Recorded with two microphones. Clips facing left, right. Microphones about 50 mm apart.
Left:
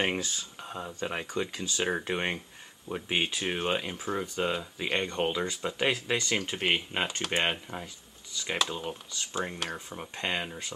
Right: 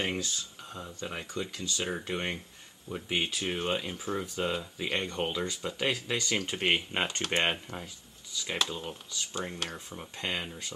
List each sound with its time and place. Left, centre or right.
0.0 s speech: left; by 5.1 s centre
5.1 s speech: centre